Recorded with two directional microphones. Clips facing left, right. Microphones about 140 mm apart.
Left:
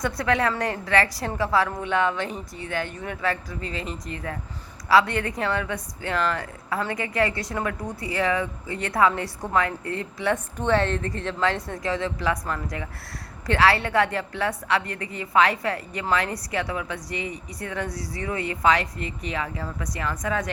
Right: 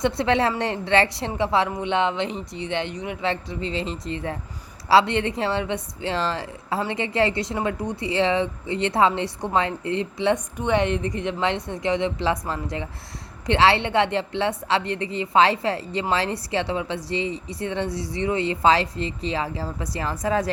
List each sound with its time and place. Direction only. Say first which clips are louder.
0.0 s a woman's voice: right 3 dB; 25° right (ahead or behind)